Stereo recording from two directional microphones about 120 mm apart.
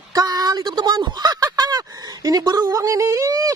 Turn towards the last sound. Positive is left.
turn(degrees=-30)  # may be behind; listen again after turning